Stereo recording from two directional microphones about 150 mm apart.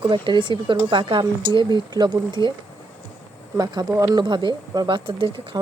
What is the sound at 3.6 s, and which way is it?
Speech, 20° right (ahead or behind).